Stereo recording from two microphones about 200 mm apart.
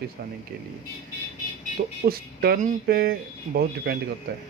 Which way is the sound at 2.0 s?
50° right (ahead or behind).